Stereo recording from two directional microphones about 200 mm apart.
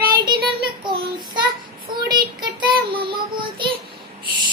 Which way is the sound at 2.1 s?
20° right (ahead or behind).